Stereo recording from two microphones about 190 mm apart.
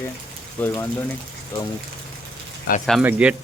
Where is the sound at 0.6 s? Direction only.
10° left (ahead or behind).